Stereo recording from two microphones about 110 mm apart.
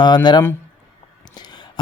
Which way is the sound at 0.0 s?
40° left (ahead or behind).